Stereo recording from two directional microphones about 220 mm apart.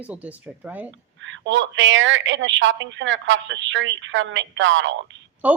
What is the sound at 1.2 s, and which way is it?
A woman's voice, 60° right (ahead or behind).